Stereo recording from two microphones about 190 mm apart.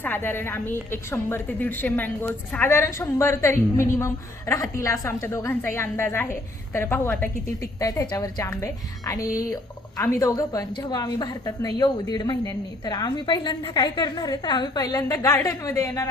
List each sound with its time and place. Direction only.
0.0 s a woman's voice: 10° left (ahead or behind)